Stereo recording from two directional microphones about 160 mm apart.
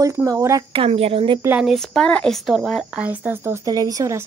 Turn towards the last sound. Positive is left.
turn(degrees=-20)  # may be behind; listen again after turning